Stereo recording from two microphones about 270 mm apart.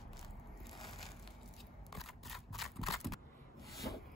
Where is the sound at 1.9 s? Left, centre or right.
Centre.